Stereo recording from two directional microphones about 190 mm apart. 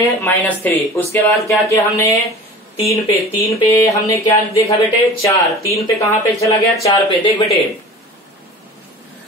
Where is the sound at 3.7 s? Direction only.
15° left (ahead or behind).